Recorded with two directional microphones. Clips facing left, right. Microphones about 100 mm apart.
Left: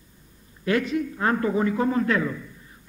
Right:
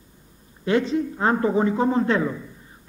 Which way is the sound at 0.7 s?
25° right (ahead or behind).